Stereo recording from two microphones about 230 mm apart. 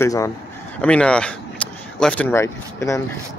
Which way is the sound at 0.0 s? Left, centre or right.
Centre.